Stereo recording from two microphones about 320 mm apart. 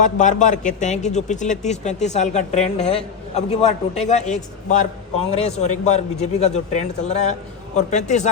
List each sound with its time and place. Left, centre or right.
0.0 s a man's voice: left